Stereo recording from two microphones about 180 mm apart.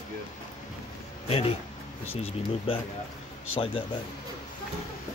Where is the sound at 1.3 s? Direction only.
35° left (ahead or behind).